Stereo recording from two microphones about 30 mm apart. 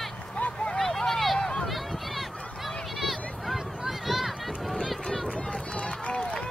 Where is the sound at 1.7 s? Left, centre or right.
Centre.